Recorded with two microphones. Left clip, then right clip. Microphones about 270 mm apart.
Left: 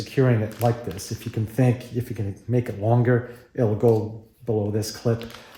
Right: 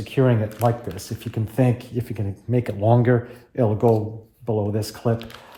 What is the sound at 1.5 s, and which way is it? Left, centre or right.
Speech, centre.